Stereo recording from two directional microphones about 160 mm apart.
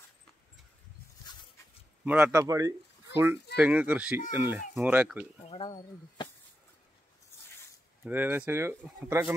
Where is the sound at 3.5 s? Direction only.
10° right (ahead or behind).